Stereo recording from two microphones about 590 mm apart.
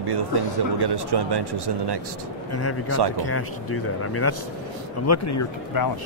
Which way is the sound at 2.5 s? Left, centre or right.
Left.